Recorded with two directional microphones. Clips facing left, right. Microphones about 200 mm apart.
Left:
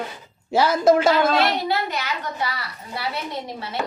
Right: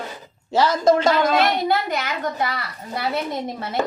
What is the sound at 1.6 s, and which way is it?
Speech, 50° right (ahead or behind).